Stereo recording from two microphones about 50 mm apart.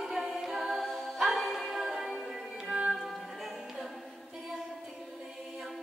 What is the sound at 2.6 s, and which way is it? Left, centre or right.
Music, centre.